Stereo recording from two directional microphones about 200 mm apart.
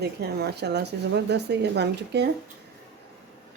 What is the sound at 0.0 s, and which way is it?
Speech, 55° right (ahead or behind).